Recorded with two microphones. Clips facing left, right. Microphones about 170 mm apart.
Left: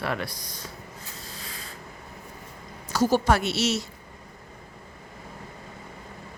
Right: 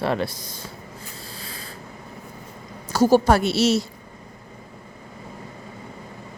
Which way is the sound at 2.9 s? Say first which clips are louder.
Right 5 dB; 30° right (ahead or behind).